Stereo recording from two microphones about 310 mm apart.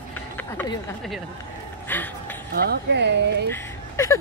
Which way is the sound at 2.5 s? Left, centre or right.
Right.